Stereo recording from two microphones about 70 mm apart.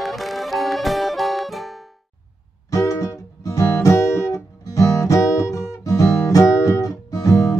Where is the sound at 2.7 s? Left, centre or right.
Left.